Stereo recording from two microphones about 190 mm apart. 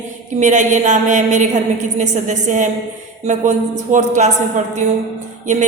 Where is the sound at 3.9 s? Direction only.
40° right (ahead or behind).